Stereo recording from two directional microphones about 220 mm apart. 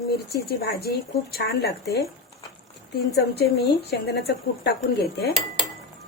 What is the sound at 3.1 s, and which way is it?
Speech, 50° left (ahead or behind).